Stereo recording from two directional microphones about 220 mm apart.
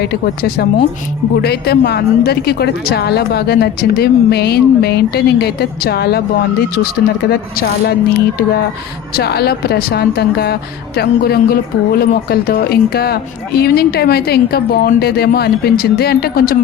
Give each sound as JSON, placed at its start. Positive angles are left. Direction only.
{"t": 0.0, "sound": "a woman's voice", "side_deg": 45}